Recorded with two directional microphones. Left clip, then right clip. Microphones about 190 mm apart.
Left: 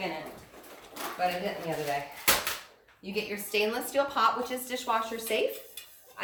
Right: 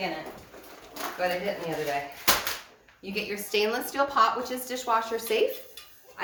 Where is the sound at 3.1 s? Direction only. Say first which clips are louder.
Right 2 dB; 20° right (ahead or behind).